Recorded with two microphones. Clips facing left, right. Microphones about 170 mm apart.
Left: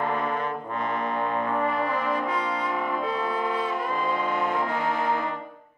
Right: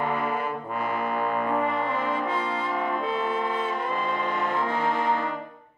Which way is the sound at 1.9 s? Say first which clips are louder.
Even; 25° right (ahead or behind).